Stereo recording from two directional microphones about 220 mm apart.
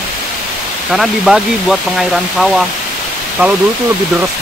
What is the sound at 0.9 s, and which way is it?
Speech, centre (ahead or behind).